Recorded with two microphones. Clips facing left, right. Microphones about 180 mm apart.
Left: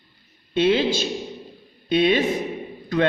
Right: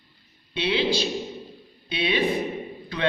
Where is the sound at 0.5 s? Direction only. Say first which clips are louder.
Left 5 dB; 45° left (ahead or behind).